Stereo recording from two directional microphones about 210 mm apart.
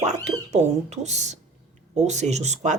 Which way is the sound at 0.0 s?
35° right (ahead or behind).